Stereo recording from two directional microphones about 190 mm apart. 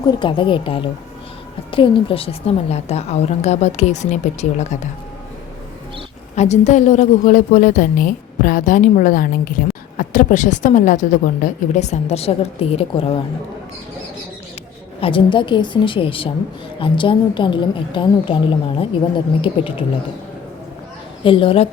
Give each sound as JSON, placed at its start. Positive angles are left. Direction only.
{"t": 0.1, "sound": "a woman's voice", "side_deg": 25}
{"t": 6.3, "sound": "a woman's voice", "side_deg": 35}
{"t": 15.0, "sound": "a woman's voice", "side_deg": 25}
{"t": 21.2, "sound": "a woman's voice", "side_deg": 30}